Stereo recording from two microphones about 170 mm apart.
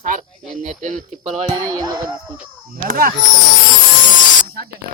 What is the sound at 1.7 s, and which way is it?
Speech, 20° right (ahead or behind).